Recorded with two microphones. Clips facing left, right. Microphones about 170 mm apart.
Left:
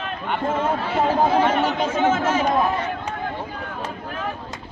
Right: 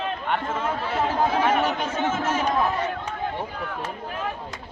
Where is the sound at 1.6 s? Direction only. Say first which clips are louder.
Left 5 dB; 90° left.